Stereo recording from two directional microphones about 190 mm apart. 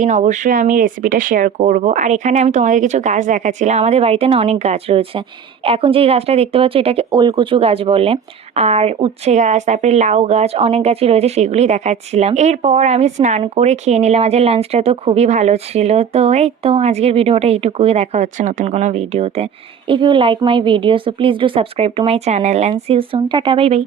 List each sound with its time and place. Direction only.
0.0 s a woman's voice: 40° right (ahead or behind)